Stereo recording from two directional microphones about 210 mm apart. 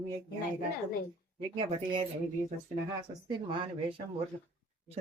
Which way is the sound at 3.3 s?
25° right (ahead or behind).